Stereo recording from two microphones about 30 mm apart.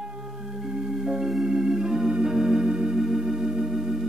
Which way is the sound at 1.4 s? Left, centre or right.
Centre.